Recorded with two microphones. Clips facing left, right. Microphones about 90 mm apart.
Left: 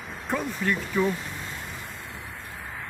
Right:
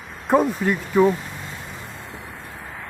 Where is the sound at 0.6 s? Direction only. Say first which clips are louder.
Right 4 dB; 25° right (ahead or behind).